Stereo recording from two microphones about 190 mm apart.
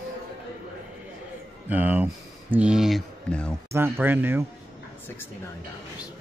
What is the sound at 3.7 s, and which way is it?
Speech, 10° right (ahead or behind).